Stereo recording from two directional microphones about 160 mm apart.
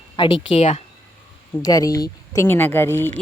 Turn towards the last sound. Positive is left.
turn(degrees=15)  # may be behind; listen again after turning